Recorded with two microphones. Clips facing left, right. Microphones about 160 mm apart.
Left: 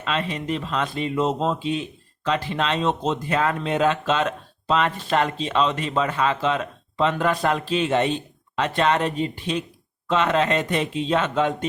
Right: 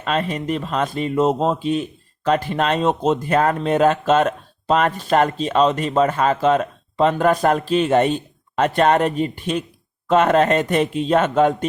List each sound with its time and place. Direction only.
0.0 s speech: 45° right (ahead or behind)